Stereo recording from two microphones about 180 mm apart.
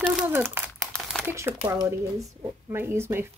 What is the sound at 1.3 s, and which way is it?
Speech, 15° right (ahead or behind).